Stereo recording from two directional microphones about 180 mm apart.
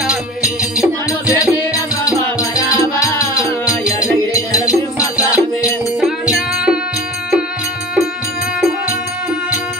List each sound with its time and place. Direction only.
0.0 s music: 5° right (ahead or behind)
2.3 s music: 5° right (ahead or behind)
3.0 s music: 15° left (ahead or behind)
5.1 s music: 5° right (ahead or behind)